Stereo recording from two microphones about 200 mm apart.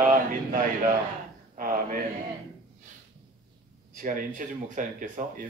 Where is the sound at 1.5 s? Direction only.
45° right (ahead or behind).